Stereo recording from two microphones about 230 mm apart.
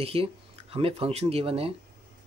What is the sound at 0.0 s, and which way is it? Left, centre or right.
Speech, right.